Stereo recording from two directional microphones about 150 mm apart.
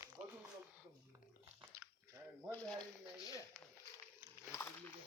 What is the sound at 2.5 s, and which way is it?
Speech, 5° left (ahead or behind).